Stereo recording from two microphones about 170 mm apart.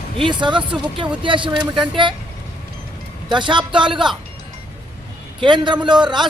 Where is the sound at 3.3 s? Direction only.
25° right (ahead or behind).